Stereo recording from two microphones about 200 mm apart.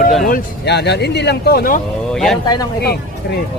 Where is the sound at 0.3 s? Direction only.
55° left (ahead or behind).